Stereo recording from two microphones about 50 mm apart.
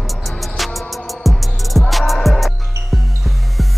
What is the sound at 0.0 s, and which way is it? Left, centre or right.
Music, centre.